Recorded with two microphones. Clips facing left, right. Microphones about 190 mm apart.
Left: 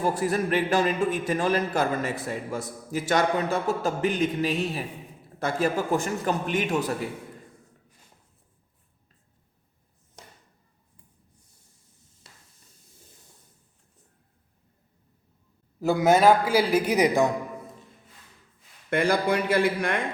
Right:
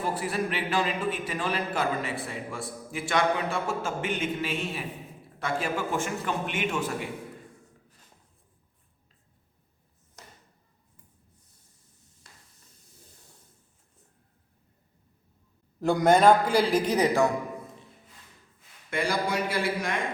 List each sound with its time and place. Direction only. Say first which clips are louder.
0.0 s a man's voice: left 4 dB; 45° left (ahead or behind)
15.8 s a man's voice: left 1 dB; 5° left (ahead or behind)
18.9 s a man's voice: left 5 dB; 55° left (ahead or behind)